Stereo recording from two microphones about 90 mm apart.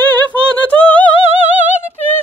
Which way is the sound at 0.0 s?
15° left (ahead or behind).